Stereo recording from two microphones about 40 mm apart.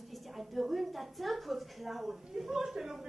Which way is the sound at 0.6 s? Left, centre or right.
Centre.